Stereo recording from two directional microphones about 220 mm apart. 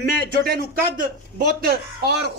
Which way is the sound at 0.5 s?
40° right (ahead or behind).